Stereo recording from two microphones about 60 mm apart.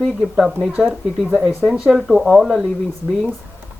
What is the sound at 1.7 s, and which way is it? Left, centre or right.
Speech, centre.